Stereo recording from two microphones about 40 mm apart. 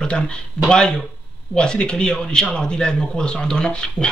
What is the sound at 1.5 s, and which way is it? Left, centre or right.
Speech, left.